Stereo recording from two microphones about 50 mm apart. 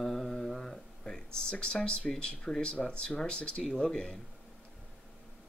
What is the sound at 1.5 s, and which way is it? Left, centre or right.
Speech, centre.